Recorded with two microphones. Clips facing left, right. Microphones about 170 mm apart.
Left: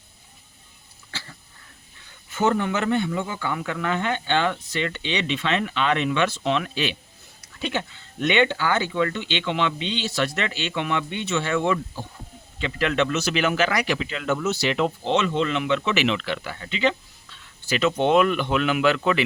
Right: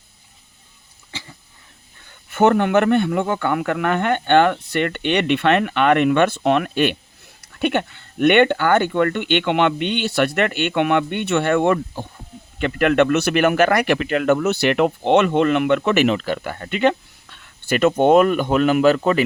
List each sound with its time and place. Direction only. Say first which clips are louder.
1.1 s cough: right 3 dB; 20° right (ahead or behind)
2.3 s speech: right 7 dB; 65° right (ahead or behind); by 19.2 s 40° right (ahead or behind)